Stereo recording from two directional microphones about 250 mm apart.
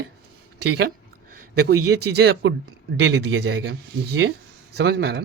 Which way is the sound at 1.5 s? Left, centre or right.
Right.